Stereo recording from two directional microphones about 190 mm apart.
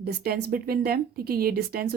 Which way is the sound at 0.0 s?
55° right (ahead or behind).